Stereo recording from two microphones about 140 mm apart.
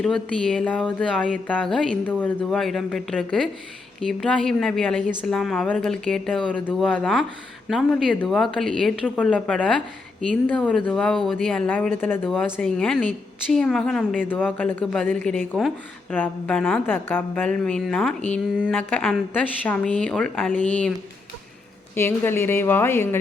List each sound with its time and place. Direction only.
0.0 s a woman's voice: 5° left (ahead or behind)
21.9 s a woman's voice: 15° left (ahead or behind)